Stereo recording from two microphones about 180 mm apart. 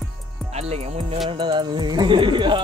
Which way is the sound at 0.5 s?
35° right (ahead or behind).